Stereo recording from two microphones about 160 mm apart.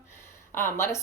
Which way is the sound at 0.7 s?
15° left (ahead or behind).